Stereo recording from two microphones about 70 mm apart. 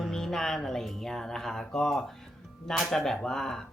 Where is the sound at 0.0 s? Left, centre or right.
Centre.